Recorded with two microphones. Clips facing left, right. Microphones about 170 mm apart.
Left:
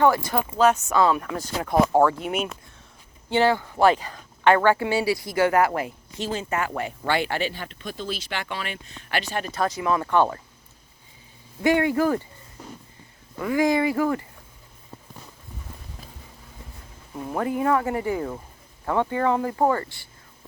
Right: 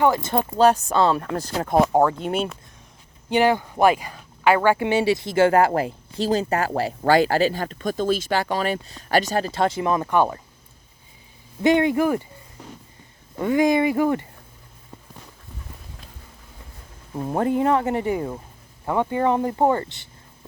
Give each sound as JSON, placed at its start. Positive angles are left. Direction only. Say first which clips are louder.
{"t": 0.0, "sound": "speech", "louder": "even", "side_deg": -20}
{"t": 1.6, "sound": "speech", "louder": "right 1 dB", "side_deg": -20}
{"t": 3.2, "sound": "speech", "louder": "right 2 dB", "side_deg": -15}
{"t": 11.6, "sound": "speech", "louder": "right 2 dB", "side_deg": -20}
{"t": 13.4, "sound": "speech", "louder": "right 3 dB", "side_deg": -25}
{"t": 17.2, "sound": "speech", "louder": "right 4 dB", "side_deg": -30}